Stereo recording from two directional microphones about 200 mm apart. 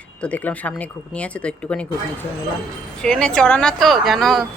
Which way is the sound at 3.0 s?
5° left (ahead or behind).